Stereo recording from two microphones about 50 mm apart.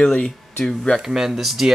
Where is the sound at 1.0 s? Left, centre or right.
Centre.